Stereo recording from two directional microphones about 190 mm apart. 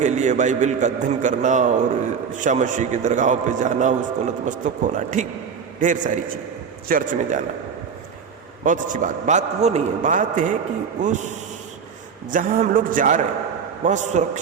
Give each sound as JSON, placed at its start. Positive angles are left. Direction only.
{"t": 0.0, "sound": "a man's voice", "side_deg": -40}
{"t": 8.6, "sound": "a man's voice", "side_deg": -45}